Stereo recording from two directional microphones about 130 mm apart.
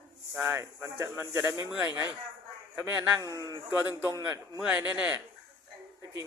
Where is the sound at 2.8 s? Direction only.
15° right (ahead or behind).